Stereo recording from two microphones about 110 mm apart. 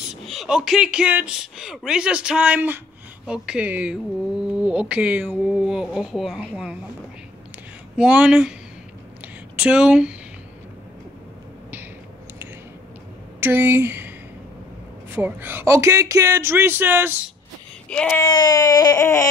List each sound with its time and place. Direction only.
0.0 s speech: centre (ahead or behind)
7.9 s speech: 10° right (ahead or behind)
9.6 s speech: 10° right (ahead or behind)
13.4 s a woman's voice: 20° right (ahead or behind)
15.1 s speech: 20° right (ahead or behind)
17.8 s speech: 10° left (ahead or behind)
18.2 s baby cry: 40° left (ahead or behind)